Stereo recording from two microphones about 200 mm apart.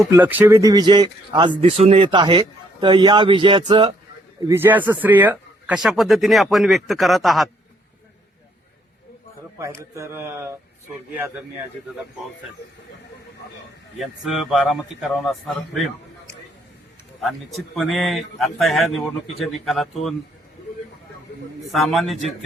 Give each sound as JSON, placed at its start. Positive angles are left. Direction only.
{"t": 0.0, "sound": "speech", "side_deg": -10}
{"t": 4.4, "sound": "speech", "side_deg": -10}
{"t": 9.6, "sound": "speech", "side_deg": -15}
{"t": 14.0, "sound": "speech", "side_deg": 0}
{"t": 17.7, "sound": "speech", "side_deg": 0}
{"t": 21.7, "sound": "speech", "side_deg": 0}